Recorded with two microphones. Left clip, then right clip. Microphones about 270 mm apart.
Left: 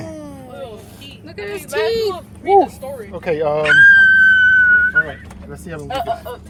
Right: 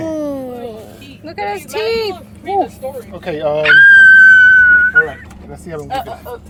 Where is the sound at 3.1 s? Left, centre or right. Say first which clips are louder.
Even; centre.